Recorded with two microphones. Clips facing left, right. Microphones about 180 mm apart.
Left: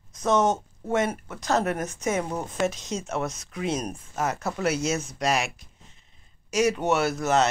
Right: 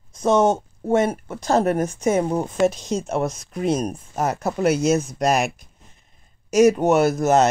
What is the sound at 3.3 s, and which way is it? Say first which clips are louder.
Speech: right 6 dB; 40° right (ahead or behind).